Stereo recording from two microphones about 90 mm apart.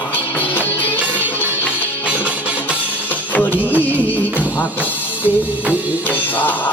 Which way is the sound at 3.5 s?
15° right (ahead or behind).